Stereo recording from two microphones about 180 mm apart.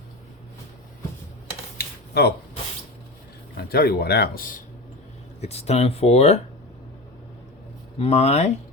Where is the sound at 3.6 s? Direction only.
60° left (ahead or behind).